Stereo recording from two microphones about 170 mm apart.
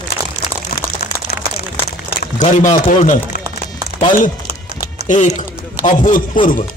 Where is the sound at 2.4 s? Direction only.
45° left (ahead or behind).